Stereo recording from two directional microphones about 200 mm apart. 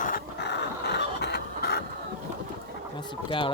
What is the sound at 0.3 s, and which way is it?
Dog, 60° left (ahead or behind).